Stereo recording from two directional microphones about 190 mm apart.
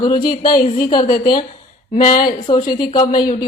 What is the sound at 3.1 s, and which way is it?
Speech, 50° left (ahead or behind).